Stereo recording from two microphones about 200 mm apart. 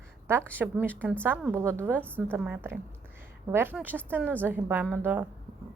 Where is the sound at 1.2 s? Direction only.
10° right (ahead or behind).